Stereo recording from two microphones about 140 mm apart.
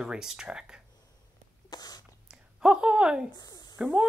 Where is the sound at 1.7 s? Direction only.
30° left (ahead or behind).